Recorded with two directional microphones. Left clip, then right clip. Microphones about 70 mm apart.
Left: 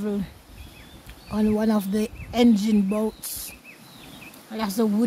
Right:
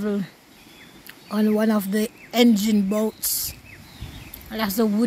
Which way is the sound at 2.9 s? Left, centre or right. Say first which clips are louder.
Right 3 dB; centre.